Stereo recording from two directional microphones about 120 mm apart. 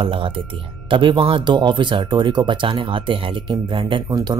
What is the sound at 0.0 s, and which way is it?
Speech, 45° right (ahead or behind).